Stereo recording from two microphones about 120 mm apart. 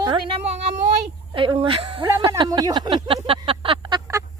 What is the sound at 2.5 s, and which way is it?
Speech, 30° right (ahead or behind).